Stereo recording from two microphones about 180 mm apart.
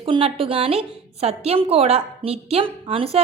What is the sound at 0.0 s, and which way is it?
A woman's voice, 30° right (ahead or behind).